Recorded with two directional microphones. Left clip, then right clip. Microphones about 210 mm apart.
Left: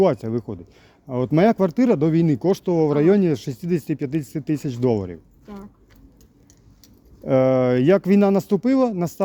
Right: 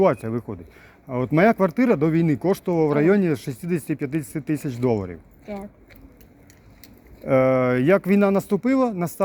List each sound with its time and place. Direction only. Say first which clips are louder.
0.0 s speech: left 1 dB; 45° left (ahead or behind)
7.3 s speech: left 1 dB; 50° left (ahead or behind)